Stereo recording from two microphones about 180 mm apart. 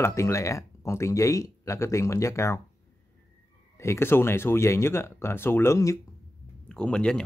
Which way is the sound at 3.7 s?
15° left (ahead or behind).